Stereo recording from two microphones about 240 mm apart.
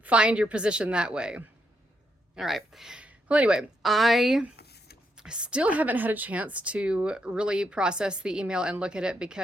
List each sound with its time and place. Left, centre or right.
0.0 s speech: centre
4.5 s a sound: left
5.1 s speech: centre